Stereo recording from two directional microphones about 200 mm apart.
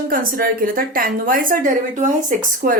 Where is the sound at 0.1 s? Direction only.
45° right (ahead or behind).